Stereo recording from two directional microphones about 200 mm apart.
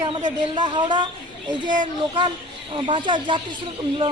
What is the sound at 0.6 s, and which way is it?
Speech, 20° right (ahead or behind).